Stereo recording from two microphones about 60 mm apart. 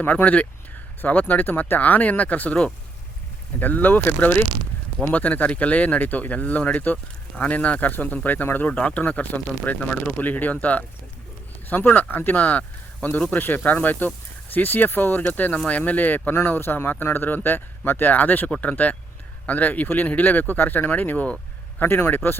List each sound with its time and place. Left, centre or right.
0.0 s speech: left